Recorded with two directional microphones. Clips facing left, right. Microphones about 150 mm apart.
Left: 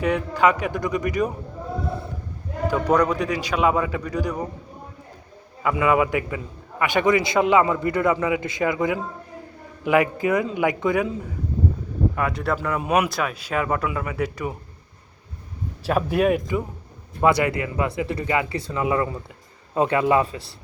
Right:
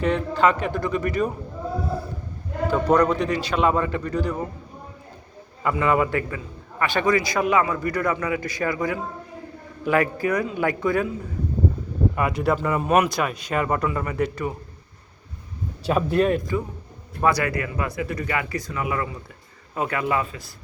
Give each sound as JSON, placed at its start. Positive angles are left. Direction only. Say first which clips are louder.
{"t": 0.0, "sound": "a man's voice", "louder": "even", "side_deg": 10}
{"t": 2.6, "sound": "a man's voice", "louder": "right 1 dB", "side_deg": 10}
{"t": 5.7, "sound": "a man's voice", "louder": "left 1 dB", "side_deg": 5}
{"t": 12.1, "sound": "speech", "louder": "right 2 dB", "side_deg": -5}
{"t": 15.8, "sound": "a man's voice", "louder": "even", "side_deg": 5}